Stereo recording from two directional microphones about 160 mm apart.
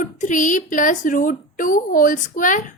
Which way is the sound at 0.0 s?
55° left (ahead or behind).